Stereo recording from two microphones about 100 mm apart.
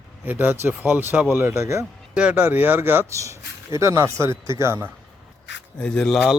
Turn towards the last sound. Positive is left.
turn(degrees=5)  # may be behind; listen again after turning